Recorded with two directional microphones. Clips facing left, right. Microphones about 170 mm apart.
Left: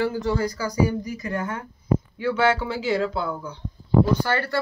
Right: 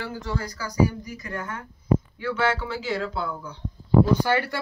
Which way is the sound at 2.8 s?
5° left (ahead or behind).